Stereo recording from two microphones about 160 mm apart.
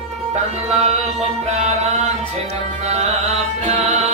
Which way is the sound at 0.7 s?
40° right (ahead or behind).